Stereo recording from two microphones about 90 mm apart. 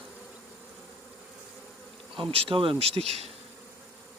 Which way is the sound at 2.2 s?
80° right.